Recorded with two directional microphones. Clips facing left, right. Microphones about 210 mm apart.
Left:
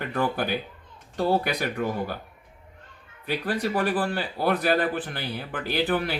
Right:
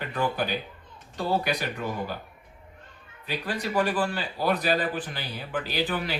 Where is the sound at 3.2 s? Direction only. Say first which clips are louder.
Left 4 dB; 55° left (ahead or behind).